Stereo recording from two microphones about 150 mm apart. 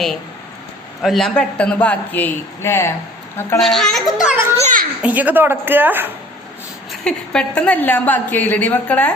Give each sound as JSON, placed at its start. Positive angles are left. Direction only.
{"t": 1.0, "sound": "a woman's voice", "side_deg": 0}
{"t": 3.6, "sound": "a child's voice", "side_deg": 0}
{"t": 4.6, "sound": "a child's voice", "side_deg": -60}
{"t": 5.0, "sound": "speech", "side_deg": -10}
{"t": 6.9, "sound": "a woman's voice", "side_deg": 5}